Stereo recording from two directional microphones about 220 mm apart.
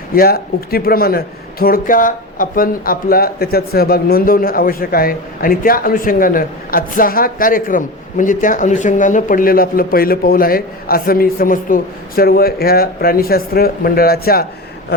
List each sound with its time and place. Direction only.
0.1 s speech: 45° left (ahead or behind)